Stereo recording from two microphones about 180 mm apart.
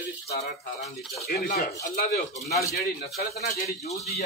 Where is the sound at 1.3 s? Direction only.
55° left (ahead or behind).